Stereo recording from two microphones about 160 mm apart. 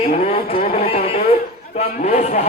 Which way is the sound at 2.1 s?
45° left (ahead or behind).